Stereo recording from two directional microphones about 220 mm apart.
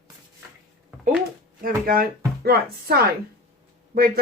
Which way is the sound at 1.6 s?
40° right (ahead or behind).